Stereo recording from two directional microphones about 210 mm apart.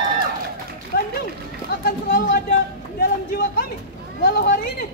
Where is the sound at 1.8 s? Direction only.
45° left (ahead or behind).